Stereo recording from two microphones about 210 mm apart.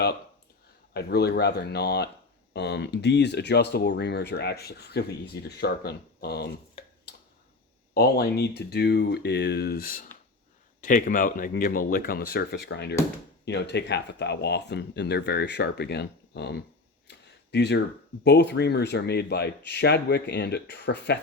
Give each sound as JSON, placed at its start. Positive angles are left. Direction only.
{"t": 0.9, "sound": "speech", "side_deg": 50}
{"t": 7.9, "sound": "speech", "side_deg": 50}
{"t": 17.1, "sound": "a sound", "side_deg": 55}
{"t": 18.2, "sound": "speech", "side_deg": 55}